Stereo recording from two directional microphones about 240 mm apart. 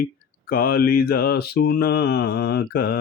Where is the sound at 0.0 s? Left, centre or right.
Left.